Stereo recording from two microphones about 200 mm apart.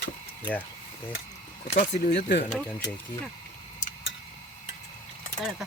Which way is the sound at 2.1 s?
60° left (ahead or behind).